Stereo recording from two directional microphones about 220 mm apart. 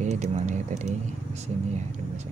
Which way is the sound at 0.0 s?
30° right (ahead or behind).